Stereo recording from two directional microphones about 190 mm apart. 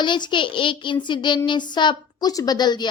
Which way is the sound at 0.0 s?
25° left (ahead or behind).